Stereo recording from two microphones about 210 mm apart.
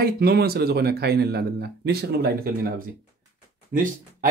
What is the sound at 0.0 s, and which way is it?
Speech, 45° right (ahead or behind).